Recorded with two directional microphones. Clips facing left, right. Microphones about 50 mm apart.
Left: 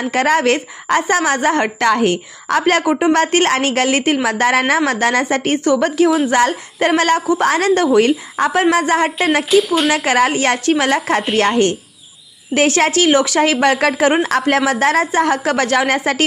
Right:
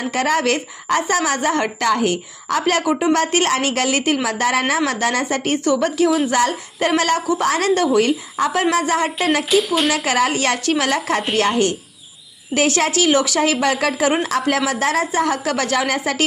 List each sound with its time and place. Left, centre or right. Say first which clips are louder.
0.0 s a woman's voice: left 4 dB; left
9.5 s speech: left 5 dB; centre
10.1 s a woman's voice: left 4 dB; left
12.5 s a woman's voice: left 4 dB; left